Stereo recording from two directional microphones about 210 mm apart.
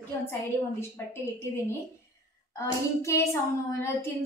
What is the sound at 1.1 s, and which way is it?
A woman's voice, 10° left (ahead or behind).